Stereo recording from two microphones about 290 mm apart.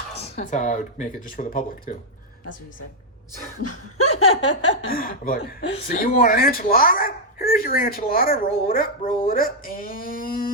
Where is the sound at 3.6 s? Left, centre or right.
Left.